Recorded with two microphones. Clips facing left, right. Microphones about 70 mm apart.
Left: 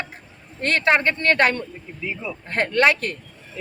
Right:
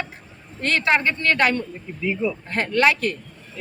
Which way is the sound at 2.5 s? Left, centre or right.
Left.